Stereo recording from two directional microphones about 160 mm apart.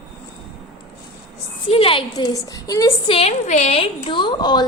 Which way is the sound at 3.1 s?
40° left (ahead or behind).